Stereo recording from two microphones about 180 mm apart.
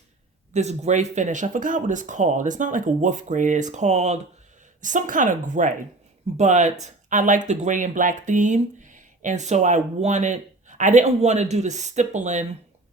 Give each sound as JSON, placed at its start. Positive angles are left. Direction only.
{"t": 0.5, "sound": "speech", "side_deg": -40}